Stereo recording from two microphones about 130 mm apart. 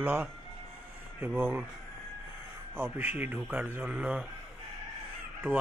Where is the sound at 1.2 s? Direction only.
15° right (ahead or behind).